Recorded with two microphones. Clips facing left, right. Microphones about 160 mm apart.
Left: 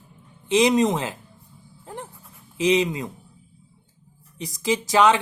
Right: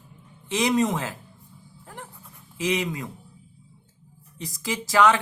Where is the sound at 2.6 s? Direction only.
20° left (ahead or behind).